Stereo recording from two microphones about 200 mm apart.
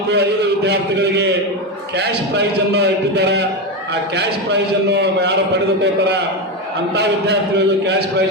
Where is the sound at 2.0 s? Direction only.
55° right (ahead or behind).